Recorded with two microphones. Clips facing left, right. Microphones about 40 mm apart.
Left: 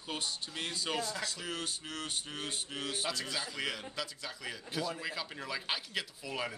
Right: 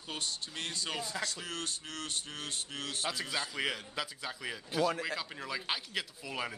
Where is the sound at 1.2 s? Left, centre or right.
Centre.